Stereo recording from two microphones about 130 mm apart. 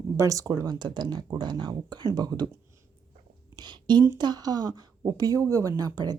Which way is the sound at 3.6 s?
35° right (ahead or behind).